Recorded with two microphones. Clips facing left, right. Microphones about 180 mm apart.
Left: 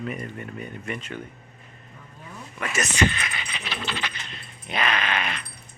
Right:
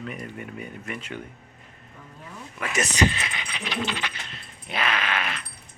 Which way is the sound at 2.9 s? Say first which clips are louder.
Even; 35° right (ahead or behind).